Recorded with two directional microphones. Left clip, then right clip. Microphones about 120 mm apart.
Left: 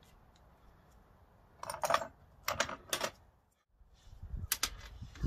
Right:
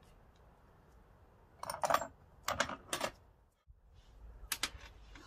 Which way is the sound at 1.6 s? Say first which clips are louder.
Left 1 dB; 20° left (ahead or behind).